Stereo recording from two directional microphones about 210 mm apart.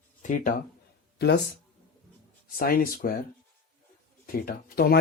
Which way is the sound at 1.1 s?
50° left (ahead or behind).